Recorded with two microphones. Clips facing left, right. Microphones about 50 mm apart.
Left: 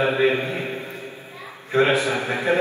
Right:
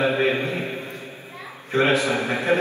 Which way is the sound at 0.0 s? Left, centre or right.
Left.